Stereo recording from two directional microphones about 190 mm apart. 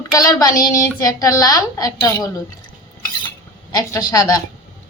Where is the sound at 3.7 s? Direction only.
20° left (ahead or behind).